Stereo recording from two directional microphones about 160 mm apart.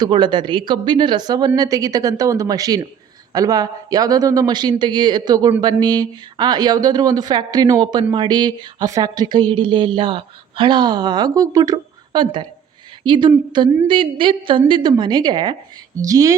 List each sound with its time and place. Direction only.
0.0 s a woman's voice: 30° right (ahead or behind)